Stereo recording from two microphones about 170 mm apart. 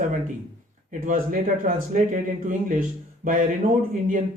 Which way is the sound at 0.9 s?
55° right (ahead or behind).